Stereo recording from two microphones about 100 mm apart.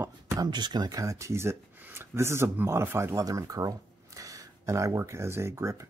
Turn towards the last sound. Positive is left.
turn(degrees=-30)  # may be behind; listen again after turning